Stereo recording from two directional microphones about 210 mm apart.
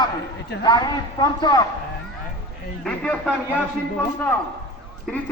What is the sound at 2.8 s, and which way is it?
A man's voice, 5° left (ahead or behind).